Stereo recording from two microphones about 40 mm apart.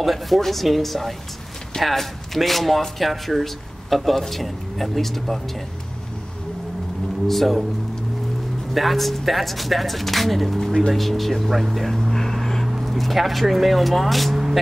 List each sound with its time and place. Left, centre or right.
0.0 s speech: centre
7.2 s speech: centre
8.7 s speech: centre
12.1 s vehicle: centre
12.8 s speech: centre